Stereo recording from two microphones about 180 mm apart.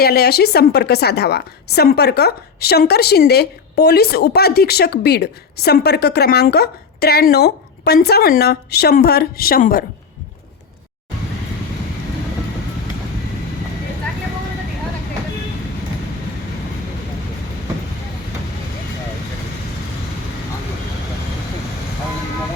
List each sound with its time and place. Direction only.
0.0 s a woman's voice: 60° left (ahead or behind)